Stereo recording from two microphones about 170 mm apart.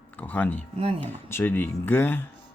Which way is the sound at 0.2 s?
10° left (ahead or behind).